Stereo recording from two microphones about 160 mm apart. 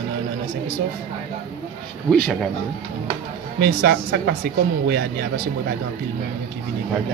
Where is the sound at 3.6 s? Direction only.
70° right (ahead or behind).